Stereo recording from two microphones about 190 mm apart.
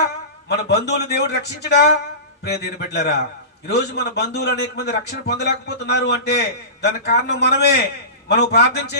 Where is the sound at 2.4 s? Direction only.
60° left (ahead or behind).